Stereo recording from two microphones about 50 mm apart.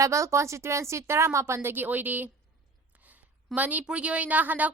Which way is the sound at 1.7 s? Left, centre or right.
Right.